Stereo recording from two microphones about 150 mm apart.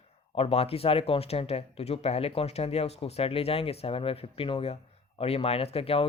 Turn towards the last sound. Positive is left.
turn(degrees=40)  # may be behind; listen again after turning